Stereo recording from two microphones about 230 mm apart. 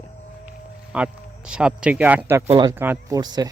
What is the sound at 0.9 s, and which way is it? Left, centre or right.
Speech, centre.